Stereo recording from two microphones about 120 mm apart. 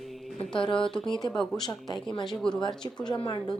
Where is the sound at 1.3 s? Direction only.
5° left (ahead or behind).